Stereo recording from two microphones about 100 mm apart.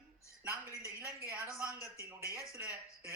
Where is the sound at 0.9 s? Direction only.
25° right (ahead or behind).